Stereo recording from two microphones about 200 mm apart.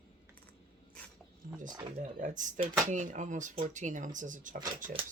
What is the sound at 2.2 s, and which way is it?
Speech, 40° right (ahead or behind).